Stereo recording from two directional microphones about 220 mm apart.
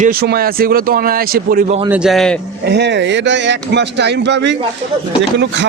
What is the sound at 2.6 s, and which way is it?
A man's voice, 50° right (ahead or behind).